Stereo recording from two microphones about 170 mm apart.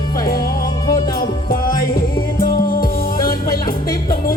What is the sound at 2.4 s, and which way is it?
Music, 60° left (ahead or behind).